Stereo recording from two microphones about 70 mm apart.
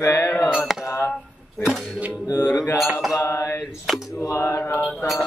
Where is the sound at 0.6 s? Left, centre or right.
Centre.